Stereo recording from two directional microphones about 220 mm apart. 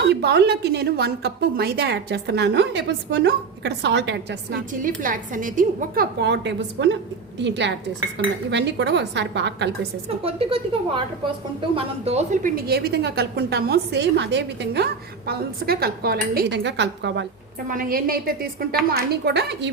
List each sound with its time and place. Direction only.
0.1 s a woman's voice: 50° right (ahead or behind)
4.7 s a woman's voice: 35° right (ahead or behind)
10.2 s a woman's voice: 25° right (ahead or behind); by 17.2 s 50° right (ahead or behind)
17.7 s a woman's voice: 40° right (ahead or behind)